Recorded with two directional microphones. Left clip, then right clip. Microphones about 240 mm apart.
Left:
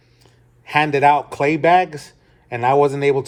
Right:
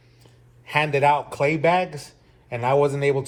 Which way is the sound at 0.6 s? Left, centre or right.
Left.